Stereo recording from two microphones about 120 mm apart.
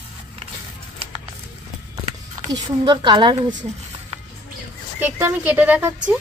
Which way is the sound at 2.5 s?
35° right (ahead or behind).